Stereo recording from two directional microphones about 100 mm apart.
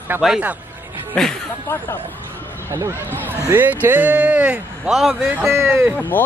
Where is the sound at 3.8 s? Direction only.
20° right (ahead or behind).